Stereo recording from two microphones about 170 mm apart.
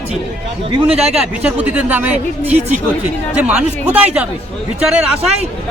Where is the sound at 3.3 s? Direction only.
10° right (ahead or behind).